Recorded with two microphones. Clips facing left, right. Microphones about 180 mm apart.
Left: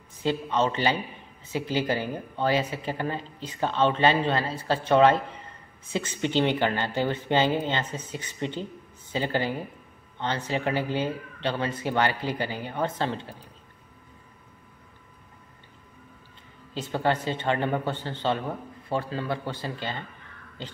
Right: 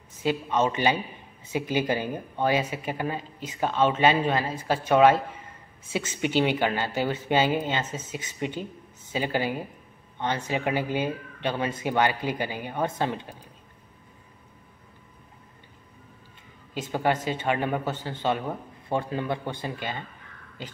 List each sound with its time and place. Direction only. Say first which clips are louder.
0.2 s speech: right 1 dB; 10° right (ahead or behind)
6.2 s speech: even; 10° right (ahead or behind)
16.9 s speech: even; 10° right (ahead or behind)